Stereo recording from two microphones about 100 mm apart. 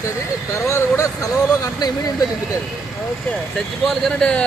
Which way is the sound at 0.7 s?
30° left (ahead or behind).